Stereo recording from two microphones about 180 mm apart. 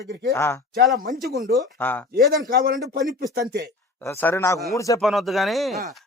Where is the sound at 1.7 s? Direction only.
10° left (ahead or behind).